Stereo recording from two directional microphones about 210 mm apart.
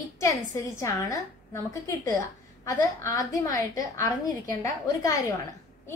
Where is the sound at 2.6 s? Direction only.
15° left (ahead or behind).